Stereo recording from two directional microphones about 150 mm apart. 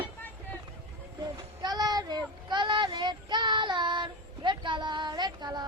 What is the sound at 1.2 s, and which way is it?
Speech, 30° right (ahead or behind).